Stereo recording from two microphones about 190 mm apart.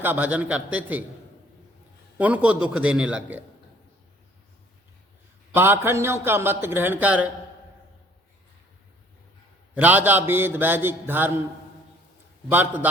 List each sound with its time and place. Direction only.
0.0 s a man's voice: 10° right (ahead or behind)
2.1 s a man's voice: 10° right (ahead or behind)
5.5 s a man's voice: 10° right (ahead or behind)
9.7 s a man's voice: 10° right (ahead or behind)
12.5 s a man's voice: 10° right (ahead or behind)